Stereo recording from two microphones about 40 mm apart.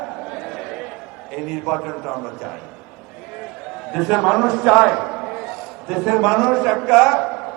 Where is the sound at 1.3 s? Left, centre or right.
Centre.